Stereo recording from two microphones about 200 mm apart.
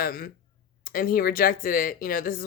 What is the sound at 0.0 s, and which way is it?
Speech, 45° left (ahead or behind).